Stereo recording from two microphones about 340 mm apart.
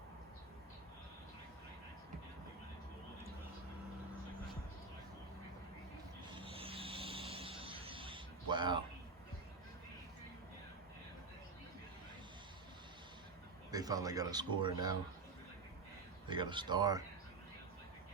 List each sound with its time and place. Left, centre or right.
6.3 s vehicle: centre
13.7 s speech: centre
16.3 s speech: centre